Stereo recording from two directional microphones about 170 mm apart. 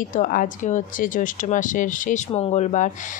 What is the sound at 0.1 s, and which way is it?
Speech, 50° left (ahead or behind).